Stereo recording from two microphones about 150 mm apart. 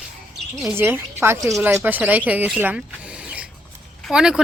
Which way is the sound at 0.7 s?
15° right (ahead or behind).